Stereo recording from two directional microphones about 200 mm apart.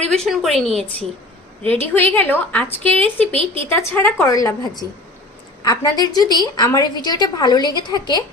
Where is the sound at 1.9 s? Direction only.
10° left (ahead or behind).